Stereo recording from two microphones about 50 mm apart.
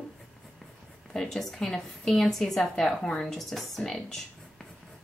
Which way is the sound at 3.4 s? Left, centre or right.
Centre.